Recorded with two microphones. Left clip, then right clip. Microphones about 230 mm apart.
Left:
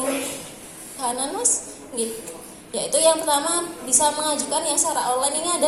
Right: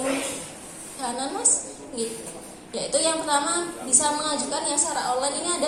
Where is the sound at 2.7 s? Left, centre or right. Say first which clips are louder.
Left 5 dB; left.